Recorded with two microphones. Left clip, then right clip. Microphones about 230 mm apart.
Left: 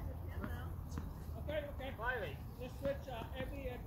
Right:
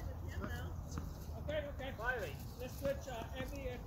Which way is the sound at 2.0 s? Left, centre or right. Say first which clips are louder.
Even; centre.